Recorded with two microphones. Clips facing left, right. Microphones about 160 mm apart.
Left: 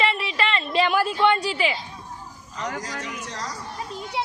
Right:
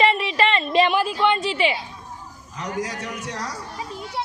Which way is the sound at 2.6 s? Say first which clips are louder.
Right 3 dB; 65° right (ahead or behind).